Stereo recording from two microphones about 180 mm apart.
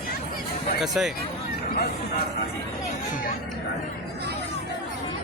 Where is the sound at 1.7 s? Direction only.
60° left (ahead or behind).